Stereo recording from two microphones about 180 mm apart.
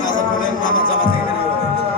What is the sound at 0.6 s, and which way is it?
Music, 50° left (ahead or behind).